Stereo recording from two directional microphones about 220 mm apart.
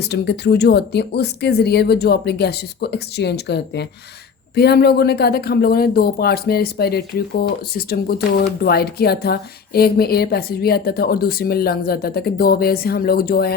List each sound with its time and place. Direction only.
0.0 s a woman's voice: 50° left (ahead or behind)